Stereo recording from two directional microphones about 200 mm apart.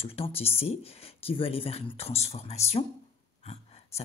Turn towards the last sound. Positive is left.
turn(degrees=30)  # may be behind; listen again after turning